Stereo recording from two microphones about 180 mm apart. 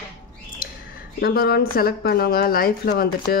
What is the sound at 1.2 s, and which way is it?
Speech, 60° left (ahead or behind).